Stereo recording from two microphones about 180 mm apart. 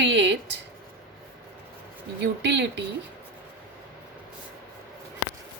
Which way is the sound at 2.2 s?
75° right (ahead or behind).